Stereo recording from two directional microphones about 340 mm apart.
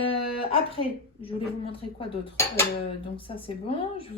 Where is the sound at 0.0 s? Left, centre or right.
Centre.